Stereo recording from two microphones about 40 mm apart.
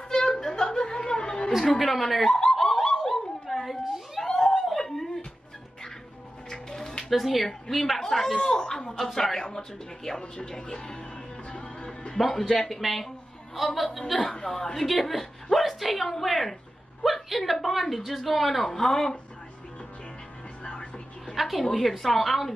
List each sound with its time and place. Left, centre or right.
0.1 s music: centre
1.9 s a woman's voice: centre
2.5 s snicker: centre
3.0 s dog: centre
3.8 s a sound: centre
4.2 s a sound: centre
4.6 s dog: centre
6.5 s music: centre
7.1 s a woman's voice: centre
8.9 s speech: centre
11.5 s music: left
12.2 s a woman's voice: centre
18.6 s speech: centre
21.4 s a woman's voice: centre